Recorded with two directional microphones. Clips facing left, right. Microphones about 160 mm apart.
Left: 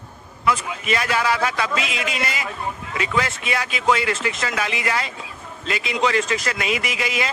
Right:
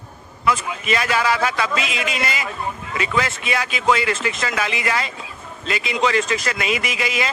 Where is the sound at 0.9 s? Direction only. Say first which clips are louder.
Right 1 dB; 90° right.